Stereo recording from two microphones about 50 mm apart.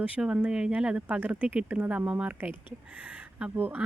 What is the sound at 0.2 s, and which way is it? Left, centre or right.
Speech, right.